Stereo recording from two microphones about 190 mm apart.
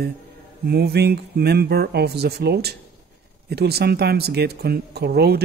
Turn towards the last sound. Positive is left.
turn(degrees=-60)  # may be behind; listen again after turning